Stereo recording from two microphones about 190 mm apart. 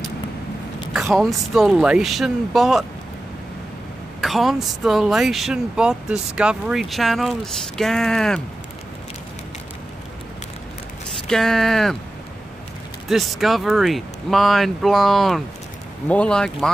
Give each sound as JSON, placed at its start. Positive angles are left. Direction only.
{"t": 1.1, "sound": "speech", "side_deg": 0}
{"t": 4.2, "sound": "speech", "side_deg": 0}
{"t": 11.1, "sound": "speech", "side_deg": 5}
{"t": 13.1, "sound": "speech", "side_deg": 0}